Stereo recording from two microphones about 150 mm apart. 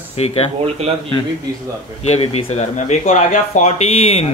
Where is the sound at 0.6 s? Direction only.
40° right (ahead or behind).